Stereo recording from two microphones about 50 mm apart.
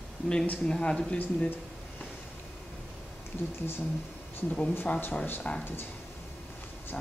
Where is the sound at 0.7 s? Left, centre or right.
Centre.